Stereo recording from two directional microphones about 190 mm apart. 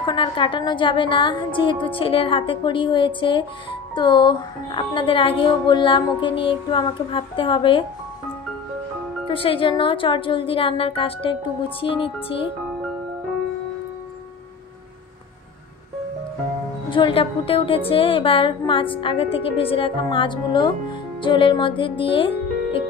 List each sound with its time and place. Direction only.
0.0 s a woman's voice: 25° left (ahead or behind)
9.3 s a woman's voice: 30° left (ahead or behind)
16.9 s a woman's voice: 25° left (ahead or behind)